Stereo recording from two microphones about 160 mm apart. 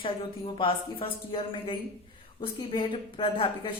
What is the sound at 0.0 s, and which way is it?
Speech, 35° left (ahead or behind).